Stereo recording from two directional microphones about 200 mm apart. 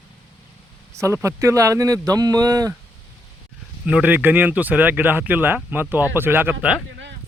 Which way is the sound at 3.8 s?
5° right (ahead or behind).